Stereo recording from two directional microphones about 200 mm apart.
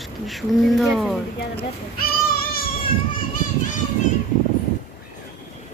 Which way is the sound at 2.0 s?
50° left (ahead or behind).